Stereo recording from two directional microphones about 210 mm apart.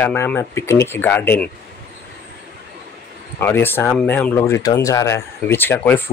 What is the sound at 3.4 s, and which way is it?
Speech, 10° left (ahead or behind).